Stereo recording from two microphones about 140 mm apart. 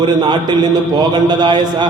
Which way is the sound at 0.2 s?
30° right (ahead or behind).